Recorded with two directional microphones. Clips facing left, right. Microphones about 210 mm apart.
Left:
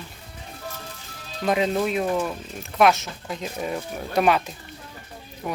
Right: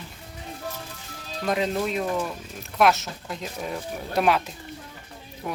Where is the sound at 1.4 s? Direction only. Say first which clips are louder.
Left 3 dB; 5° left (ahead or behind).